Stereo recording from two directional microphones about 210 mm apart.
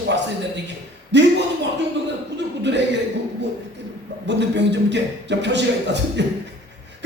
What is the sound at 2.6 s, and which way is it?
Speech, 55° right (ahead or behind).